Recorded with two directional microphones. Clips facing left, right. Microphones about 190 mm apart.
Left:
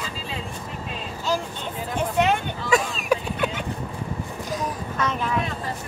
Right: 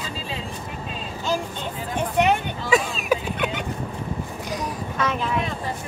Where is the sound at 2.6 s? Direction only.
Centre (ahead or behind).